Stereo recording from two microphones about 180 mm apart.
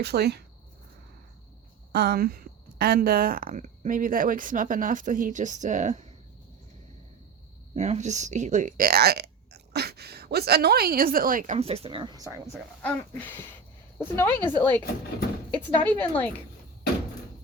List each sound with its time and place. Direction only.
0.0 s speech: 65° right (ahead or behind)
1.9 s speech: 65° right (ahead or behind); by 6.1 s 40° right (ahead or behind)
7.7 s speech: 40° right (ahead or behind); by 12.5 s 20° right (ahead or behind)
12.8 s speech: 10° left (ahead or behind)
15.8 s speech: 10° left (ahead or behind)